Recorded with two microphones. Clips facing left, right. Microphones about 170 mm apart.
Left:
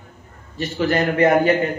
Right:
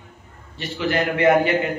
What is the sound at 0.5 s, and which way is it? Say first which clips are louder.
Speech: left 3 dB; 40° left (ahead or behind).